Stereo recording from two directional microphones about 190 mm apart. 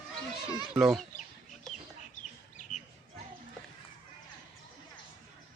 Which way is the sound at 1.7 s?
Centre (ahead or behind).